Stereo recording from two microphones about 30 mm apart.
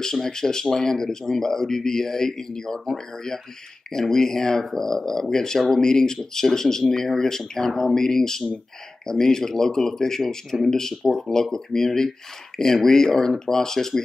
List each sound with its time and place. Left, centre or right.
0.0 s speech: centre